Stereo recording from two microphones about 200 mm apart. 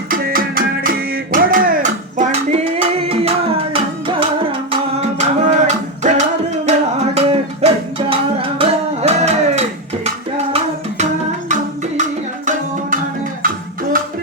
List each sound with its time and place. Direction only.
0.1 s music: 50° right (ahead or behind); by 10.1 s 35° right (ahead or behind)
11.4 s music: 35° right (ahead or behind)